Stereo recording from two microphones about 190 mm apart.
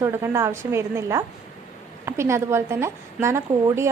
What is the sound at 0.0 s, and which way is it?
Speech, 15° right (ahead or behind).